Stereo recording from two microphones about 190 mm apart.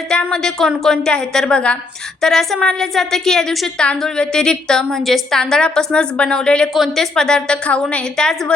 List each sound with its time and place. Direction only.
0.1 s a woman's voice: 5° left (ahead or behind)